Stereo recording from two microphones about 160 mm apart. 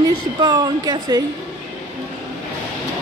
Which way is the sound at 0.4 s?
25° right (ahead or behind).